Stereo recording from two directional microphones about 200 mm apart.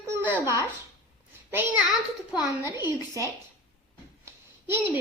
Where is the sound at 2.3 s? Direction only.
5° right (ahead or behind).